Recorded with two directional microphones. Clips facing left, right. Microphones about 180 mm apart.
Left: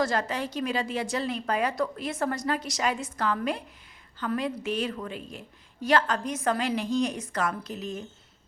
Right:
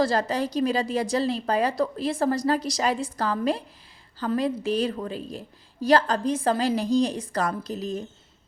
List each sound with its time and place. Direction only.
0.0 s a woman's voice: 35° right (ahead or behind)